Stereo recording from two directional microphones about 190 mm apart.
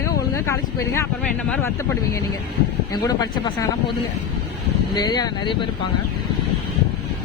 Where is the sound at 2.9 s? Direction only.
20° left (ahead or behind).